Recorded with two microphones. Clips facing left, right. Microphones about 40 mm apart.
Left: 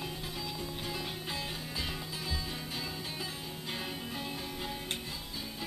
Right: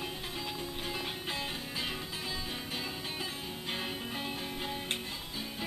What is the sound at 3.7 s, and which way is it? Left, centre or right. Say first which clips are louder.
Music: right 2 dB; centre.